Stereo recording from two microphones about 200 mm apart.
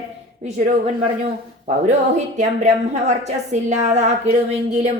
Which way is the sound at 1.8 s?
35° right (ahead or behind).